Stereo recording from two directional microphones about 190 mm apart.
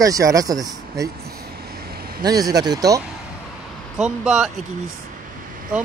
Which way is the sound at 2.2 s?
20° right (ahead or behind).